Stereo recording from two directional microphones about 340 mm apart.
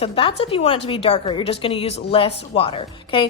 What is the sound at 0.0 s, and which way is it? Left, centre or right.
A woman's voice, centre.